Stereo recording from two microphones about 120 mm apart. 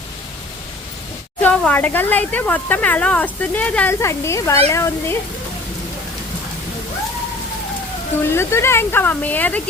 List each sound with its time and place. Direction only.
1.4 s speech: 15° left (ahead or behind)
4.0 s speech: 25° left (ahead or behind)
8.3 s speech: 20° left (ahead or behind)